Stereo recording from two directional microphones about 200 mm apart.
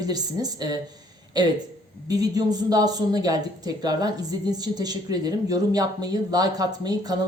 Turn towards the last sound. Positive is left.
turn(degrees=-20)  # may be behind; listen again after turning